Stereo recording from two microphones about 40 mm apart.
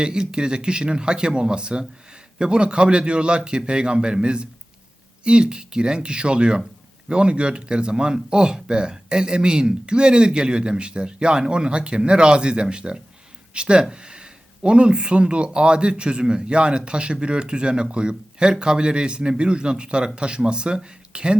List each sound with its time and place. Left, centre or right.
0.0 s speech: centre